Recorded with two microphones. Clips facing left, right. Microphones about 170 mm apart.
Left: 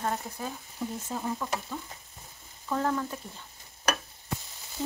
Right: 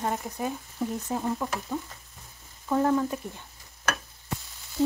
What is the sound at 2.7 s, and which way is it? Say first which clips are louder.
Frying: right 5 dB; 20° right (ahead or behind).